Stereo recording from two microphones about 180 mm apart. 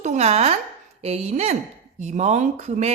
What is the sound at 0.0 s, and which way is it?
Speech, 40° right (ahead or behind).